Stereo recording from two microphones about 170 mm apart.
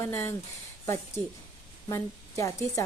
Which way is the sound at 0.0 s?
15° left (ahead or behind).